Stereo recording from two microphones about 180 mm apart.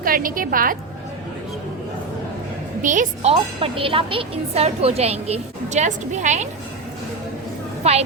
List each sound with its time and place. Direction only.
0.0 s a woman's voice: 50° right (ahead or behind)
2.8 s a woman's voice: 45° right (ahead or behind)
3.3 s a woman's voice: 30° right (ahead or behind)
7.8 s a woman's voice: 35° right (ahead or behind)